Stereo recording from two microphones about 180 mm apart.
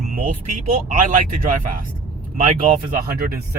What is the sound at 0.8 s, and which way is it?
Speech, 45° right (ahead or behind).